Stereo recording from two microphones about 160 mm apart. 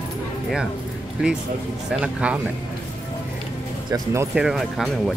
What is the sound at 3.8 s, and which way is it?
Speech, 25° right (ahead or behind).